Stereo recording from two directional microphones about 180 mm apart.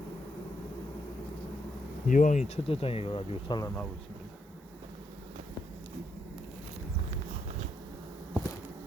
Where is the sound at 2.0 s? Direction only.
45° left (ahead or behind).